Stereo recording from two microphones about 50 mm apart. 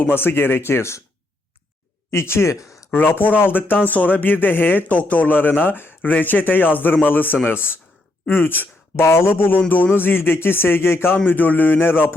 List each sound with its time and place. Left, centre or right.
0.0 s a man's voice: left
2.0 s speech: left
3.2 s a man's voice: left
9.0 s a man's voice: left
11.3 s speech: left